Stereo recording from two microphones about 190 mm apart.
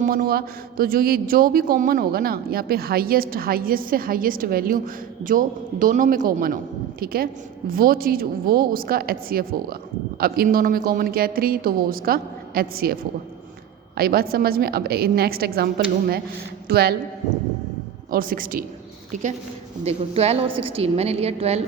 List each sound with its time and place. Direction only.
0.0 s a man's voice: 45° right (ahead or behind)
18.1 s a man's voice: 50° right (ahead or behind); by 21.6 s 35° right (ahead or behind)